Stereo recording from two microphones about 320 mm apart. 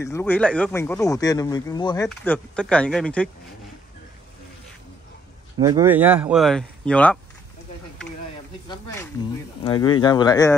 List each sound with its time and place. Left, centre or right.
0.0 s speech: centre
5.6 s speech: centre
9.6 s speech: centre